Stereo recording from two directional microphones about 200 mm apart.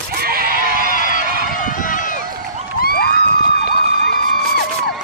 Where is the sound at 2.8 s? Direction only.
50° left (ahead or behind).